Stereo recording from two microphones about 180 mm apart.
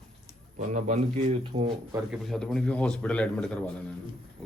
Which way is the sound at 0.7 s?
40° right (ahead or behind).